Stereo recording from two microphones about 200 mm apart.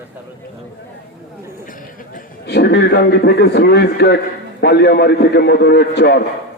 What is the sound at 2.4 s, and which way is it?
A man's voice, 55° left (ahead or behind).